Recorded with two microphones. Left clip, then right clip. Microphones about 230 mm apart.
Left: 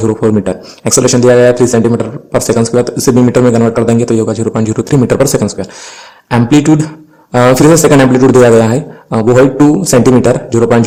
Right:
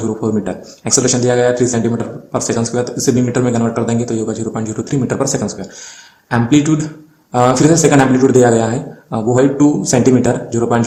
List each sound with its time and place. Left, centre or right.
0.2 s a man's voice: left